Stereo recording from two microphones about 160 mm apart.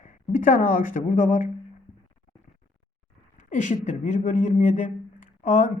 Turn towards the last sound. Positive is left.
turn(degrees=50)  # may be behind; listen again after turning